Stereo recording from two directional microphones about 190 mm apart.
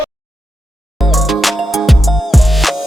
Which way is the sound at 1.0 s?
Centre (ahead or behind).